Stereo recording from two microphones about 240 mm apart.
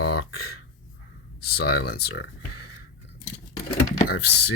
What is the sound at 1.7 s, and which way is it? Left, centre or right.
Speech, left.